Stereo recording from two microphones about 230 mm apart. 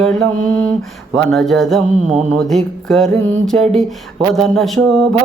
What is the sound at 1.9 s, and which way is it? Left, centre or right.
Mantra, right.